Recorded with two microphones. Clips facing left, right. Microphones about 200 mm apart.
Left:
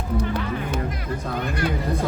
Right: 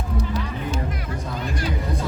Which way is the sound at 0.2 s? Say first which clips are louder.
Left 1 dB; 55° left (ahead or behind).